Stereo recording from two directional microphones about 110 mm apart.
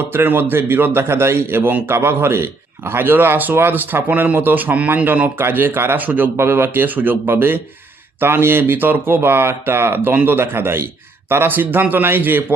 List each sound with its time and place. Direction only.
0.1 s a man's voice: 20° right (ahead or behind)